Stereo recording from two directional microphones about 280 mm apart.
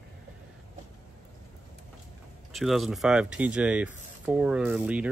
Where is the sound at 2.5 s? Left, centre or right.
Centre.